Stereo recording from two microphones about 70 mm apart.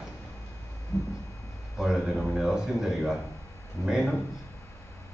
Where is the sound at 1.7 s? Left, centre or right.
Centre.